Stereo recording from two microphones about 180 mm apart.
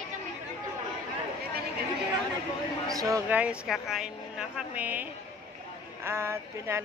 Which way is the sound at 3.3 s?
5° right (ahead or behind).